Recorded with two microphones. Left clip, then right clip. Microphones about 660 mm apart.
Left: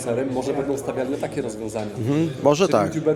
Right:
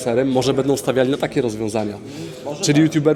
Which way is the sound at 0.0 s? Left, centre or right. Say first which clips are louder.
Right 6 dB; right.